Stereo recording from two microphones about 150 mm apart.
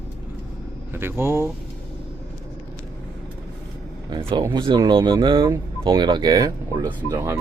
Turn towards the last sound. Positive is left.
turn(degrees=-15)  # may be behind; listen again after turning